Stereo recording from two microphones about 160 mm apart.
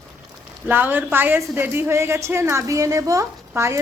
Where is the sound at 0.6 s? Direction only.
10° right (ahead or behind).